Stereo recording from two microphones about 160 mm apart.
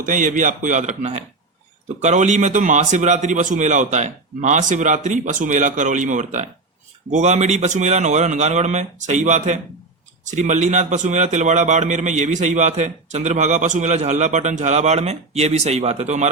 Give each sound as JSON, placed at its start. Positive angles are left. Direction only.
{"t": 0.0, "sound": "a man's voice", "side_deg": -55}